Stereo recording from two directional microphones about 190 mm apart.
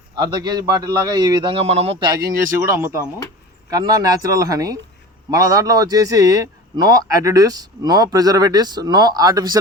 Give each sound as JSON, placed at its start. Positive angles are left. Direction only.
{"t": 0.2, "sound": "speech", "side_deg": -20}
{"t": 2.6, "sound": "speech", "side_deg": -15}